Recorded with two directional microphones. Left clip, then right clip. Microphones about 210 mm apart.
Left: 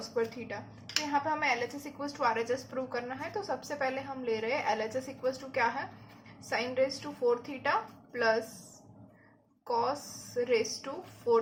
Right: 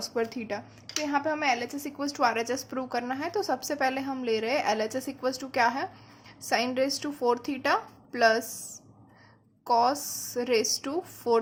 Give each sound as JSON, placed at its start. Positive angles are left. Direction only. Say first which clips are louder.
{"t": 0.1, "sound": "a woman's voice", "louder": "right 1 dB", "side_deg": -55}
{"t": 9.6, "sound": "a woman's voice", "louder": "right 7 dB", "side_deg": -50}